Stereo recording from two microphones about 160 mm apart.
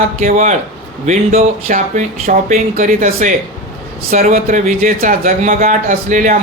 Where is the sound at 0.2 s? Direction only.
50° right (ahead or behind).